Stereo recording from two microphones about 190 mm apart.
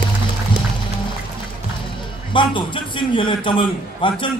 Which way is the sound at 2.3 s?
25° left (ahead or behind).